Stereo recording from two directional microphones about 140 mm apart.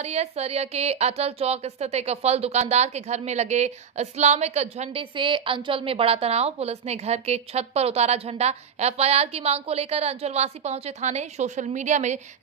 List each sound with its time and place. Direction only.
0.0 s a woman's voice: 50° right (ahead or behind)
5.1 s a woman's voice: 35° right (ahead or behind); by 12.2 s 60° right (ahead or behind)